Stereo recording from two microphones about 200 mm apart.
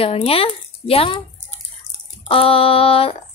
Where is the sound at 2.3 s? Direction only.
30° left (ahead or behind).